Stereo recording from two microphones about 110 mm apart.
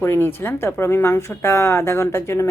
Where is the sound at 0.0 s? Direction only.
20° left (ahead or behind).